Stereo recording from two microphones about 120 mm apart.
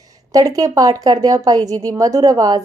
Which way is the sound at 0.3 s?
30° right (ahead or behind).